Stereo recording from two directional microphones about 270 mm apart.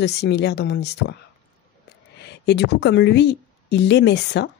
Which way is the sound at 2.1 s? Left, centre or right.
Left.